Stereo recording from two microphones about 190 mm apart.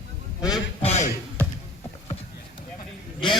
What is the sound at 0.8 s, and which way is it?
Music, 35° left (ahead or behind).